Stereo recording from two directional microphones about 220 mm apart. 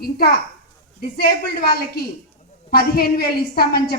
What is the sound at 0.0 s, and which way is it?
A woman's voice, 45° left (ahead or behind).